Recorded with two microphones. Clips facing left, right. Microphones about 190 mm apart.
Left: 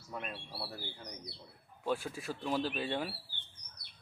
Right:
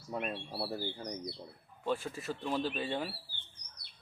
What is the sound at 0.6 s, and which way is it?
Speech, 35° right (ahead or behind).